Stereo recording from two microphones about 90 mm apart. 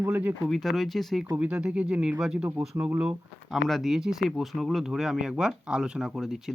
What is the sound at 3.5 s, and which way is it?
Speech, centre (ahead or behind).